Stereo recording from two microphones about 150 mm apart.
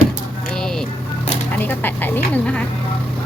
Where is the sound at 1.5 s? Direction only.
10° left (ahead or behind).